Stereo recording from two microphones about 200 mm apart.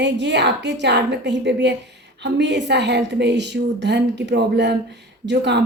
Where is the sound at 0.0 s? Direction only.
60° right (ahead or behind).